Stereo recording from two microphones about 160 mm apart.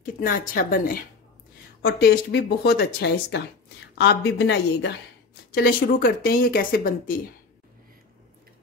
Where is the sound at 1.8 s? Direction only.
80° left.